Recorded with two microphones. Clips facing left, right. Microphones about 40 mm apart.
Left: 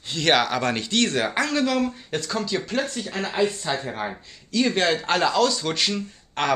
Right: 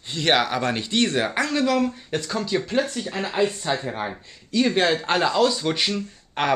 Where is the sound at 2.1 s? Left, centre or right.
Centre.